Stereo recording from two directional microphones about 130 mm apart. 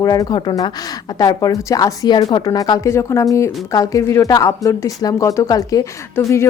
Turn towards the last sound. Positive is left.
turn(degrees=20)  # may be behind; listen again after turning